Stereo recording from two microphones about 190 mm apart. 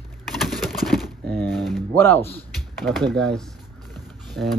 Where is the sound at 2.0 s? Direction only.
10° left (ahead or behind).